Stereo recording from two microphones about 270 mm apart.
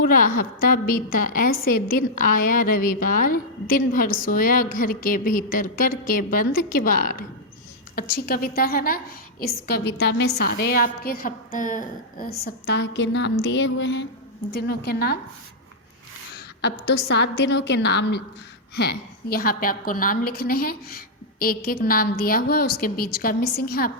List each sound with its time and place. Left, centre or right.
0.0 s a woman's voice: left
16.6 s a woman's voice: left